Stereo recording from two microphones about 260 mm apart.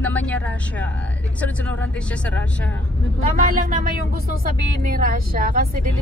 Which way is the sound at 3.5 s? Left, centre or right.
Right.